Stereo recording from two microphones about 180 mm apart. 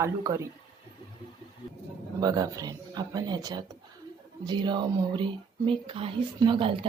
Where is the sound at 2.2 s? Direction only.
20° right (ahead or behind).